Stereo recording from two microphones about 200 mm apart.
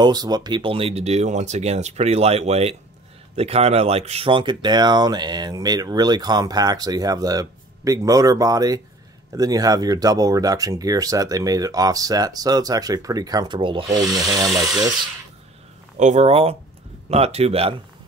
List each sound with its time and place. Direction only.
0.0 s speech: 20° right (ahead or behind)
16.0 s speech: 35° right (ahead or behind)